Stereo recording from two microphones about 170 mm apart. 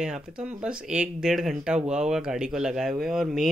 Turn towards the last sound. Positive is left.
turn(degrees=0)  # may be behind; listen again after turning